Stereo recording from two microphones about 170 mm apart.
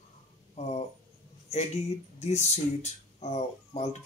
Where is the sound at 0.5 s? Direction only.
40° left (ahead or behind).